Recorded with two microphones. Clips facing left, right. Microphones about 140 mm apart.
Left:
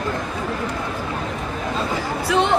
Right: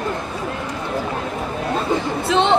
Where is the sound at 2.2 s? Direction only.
25° right (ahead or behind).